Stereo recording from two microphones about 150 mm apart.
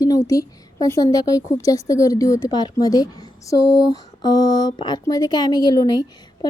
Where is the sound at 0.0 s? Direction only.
20° left (ahead or behind).